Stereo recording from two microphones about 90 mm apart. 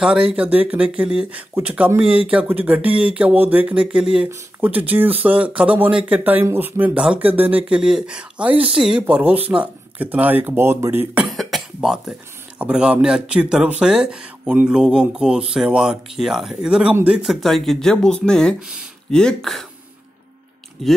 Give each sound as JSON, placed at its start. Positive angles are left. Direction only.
{"t": 0.0, "sound": "speech", "side_deg": -10}
{"t": 6.9, "sound": "speech", "side_deg": -10}
{"t": 11.2, "sound": "speech", "side_deg": 0}